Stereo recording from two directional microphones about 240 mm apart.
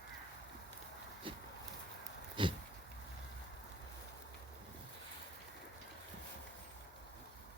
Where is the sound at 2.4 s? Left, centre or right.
Right.